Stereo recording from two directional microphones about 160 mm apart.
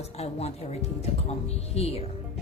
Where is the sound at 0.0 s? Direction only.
40° left (ahead or behind).